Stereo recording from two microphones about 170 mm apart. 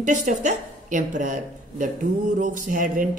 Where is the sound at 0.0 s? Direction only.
45° right (ahead or behind).